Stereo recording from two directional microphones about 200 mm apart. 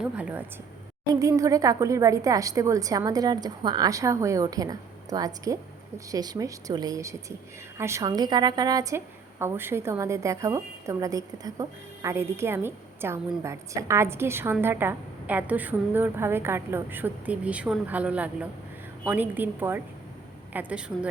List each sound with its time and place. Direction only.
0.0 s a woman's voice: 5° right (ahead or behind)